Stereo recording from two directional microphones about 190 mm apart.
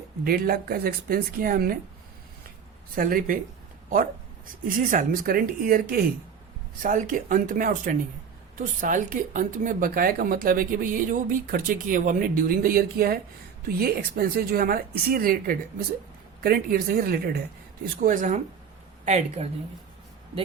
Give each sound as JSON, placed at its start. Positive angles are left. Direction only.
{"t": 0.3, "sound": "a woman's voice", "side_deg": -55}
{"t": 2.9, "sound": "a woman's voice", "side_deg": -50}
{"t": 6.8, "sound": "a woman's voice", "side_deg": -45}